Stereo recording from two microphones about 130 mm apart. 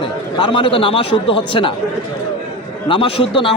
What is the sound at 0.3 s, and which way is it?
A man's voice, 40° left (ahead or behind).